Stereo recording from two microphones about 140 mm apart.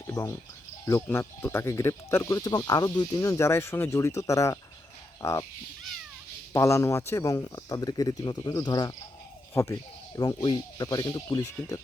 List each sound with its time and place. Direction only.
0.1 s cricket: 20° left (ahead or behind)
0.9 s speech: 20° left (ahead or behind)
6.5 s speech: 20° left (ahead or behind)
9.5 s speech: 15° left (ahead or behind)
10.2 s speech: 30° left (ahead or behind)